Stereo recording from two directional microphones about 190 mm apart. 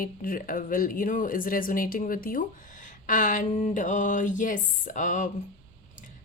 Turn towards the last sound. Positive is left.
turn(degrees=40)  # may be behind; listen again after turning